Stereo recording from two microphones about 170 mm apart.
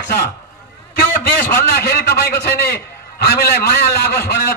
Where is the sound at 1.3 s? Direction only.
65° left (ahead or behind).